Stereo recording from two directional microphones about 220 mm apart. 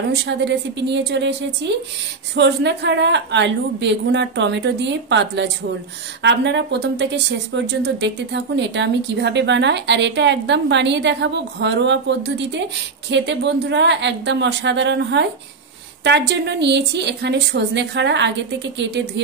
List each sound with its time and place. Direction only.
0.1 s a woman's voice: 50° right (ahead or behind)